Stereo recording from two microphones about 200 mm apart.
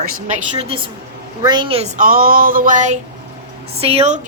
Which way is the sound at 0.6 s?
25° right (ahead or behind).